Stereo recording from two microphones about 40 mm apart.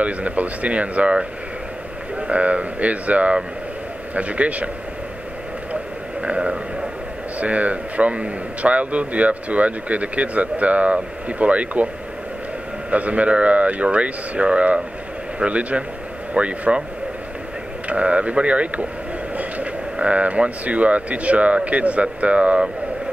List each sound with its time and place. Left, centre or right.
0.0 s a man's voice: right
6.2 s a sound: right
7.3 s a man's voice: right
12.9 s a man's voice: right
17.8 s a man's voice: right